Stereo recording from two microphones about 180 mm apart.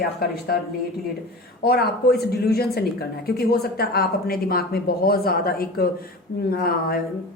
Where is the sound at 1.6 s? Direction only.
60° left (ahead or behind).